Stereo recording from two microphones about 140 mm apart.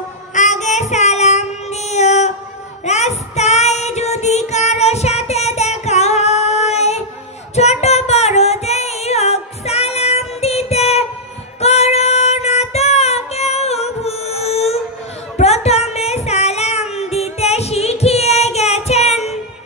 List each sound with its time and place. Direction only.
0.3 s child singing: 60° left (ahead or behind)
7.5 s music: 50° left (ahead or behind)
11.6 s child singing: 50° left (ahead or behind)
15.3 s music: 50° left (ahead or behind)